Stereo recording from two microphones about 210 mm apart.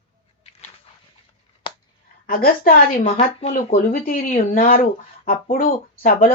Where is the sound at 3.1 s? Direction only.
25° left (ahead or behind).